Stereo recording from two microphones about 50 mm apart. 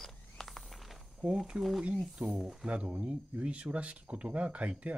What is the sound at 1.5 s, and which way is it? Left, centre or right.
Speech, right.